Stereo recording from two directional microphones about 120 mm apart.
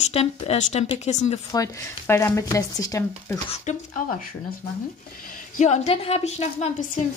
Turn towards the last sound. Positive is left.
turn(degrees=80)